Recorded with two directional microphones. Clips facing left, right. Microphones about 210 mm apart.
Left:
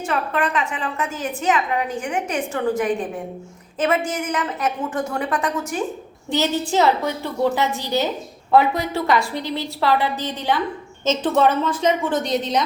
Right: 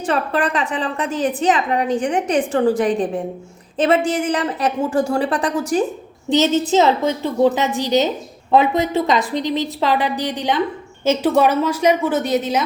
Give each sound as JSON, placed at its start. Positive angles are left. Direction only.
{"t": 0.0, "sound": "a woman's voice", "side_deg": -35}
{"t": 6.2, "sound": "a woman's voice", "side_deg": -20}